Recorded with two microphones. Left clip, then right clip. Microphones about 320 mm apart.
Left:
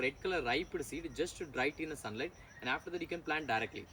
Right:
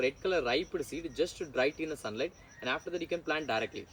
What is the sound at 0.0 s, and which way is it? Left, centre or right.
Speech, centre.